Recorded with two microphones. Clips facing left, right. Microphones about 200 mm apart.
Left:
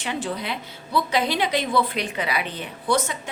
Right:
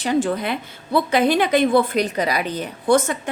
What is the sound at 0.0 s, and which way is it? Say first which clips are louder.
A woman's voice: right 8 dB; 45° right (ahead or behind).